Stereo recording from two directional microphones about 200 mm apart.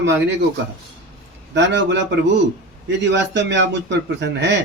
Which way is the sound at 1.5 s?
60° right (ahead or behind).